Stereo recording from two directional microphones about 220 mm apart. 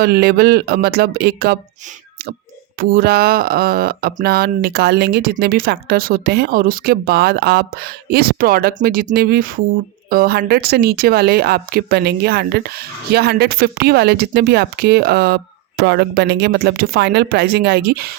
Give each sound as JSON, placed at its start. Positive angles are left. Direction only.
{"t": 0.0, "sound": "speech", "side_deg": -45}
{"t": 2.7, "sound": "speech", "side_deg": -40}